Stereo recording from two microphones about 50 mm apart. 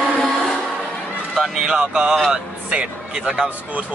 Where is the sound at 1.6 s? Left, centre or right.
Centre.